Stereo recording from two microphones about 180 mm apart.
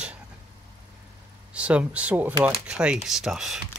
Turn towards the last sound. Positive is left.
turn(degrees=-5)  # may be behind; listen again after turning